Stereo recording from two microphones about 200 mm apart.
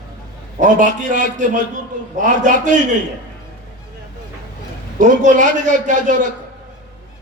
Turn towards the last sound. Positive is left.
turn(degrees=-40)  # may be behind; listen again after turning